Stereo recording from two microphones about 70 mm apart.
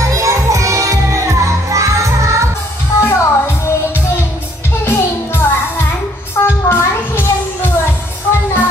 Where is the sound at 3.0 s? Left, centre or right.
Left.